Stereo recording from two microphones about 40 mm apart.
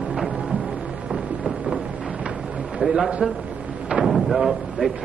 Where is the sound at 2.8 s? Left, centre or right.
Right.